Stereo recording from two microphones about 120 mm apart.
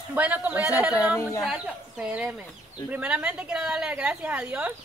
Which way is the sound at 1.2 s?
25° left (ahead or behind).